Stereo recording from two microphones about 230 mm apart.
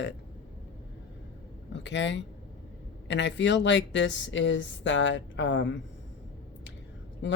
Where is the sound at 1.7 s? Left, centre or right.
Left.